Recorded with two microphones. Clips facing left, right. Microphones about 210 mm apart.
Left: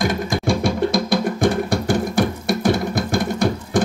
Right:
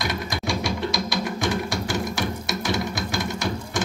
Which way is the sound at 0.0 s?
50° left (ahead or behind).